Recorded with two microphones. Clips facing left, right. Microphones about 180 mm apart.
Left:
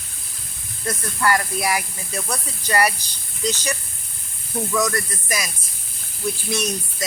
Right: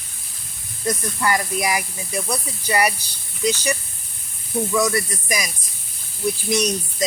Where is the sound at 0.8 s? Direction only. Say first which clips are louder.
Even; 15° right (ahead or behind).